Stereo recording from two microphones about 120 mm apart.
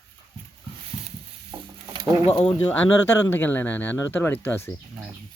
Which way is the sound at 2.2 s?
50° left (ahead or behind).